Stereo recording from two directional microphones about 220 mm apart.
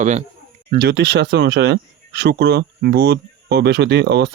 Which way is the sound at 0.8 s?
50° right (ahead or behind).